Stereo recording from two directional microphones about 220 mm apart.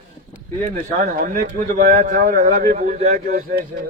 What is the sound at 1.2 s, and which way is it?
A man's voice, 40° right (ahead or behind).